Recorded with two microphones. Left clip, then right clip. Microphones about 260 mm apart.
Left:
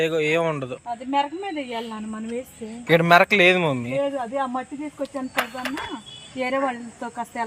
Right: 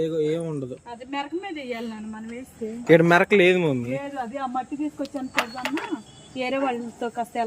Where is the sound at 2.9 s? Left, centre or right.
Centre.